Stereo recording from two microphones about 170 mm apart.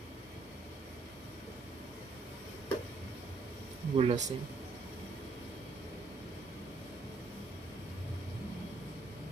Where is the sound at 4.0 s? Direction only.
35° right (ahead or behind).